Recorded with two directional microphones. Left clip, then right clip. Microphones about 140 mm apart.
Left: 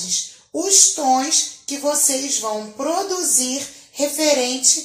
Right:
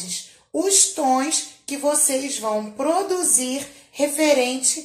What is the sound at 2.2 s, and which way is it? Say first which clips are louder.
Speech: left 1 dB; centre (ahead or behind).